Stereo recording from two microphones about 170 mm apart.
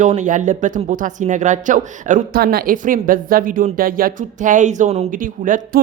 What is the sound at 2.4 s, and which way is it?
A woman's voice, 65° right (ahead or behind).